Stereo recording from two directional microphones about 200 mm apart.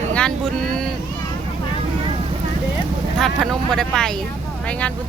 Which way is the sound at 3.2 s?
Centre (ahead or behind).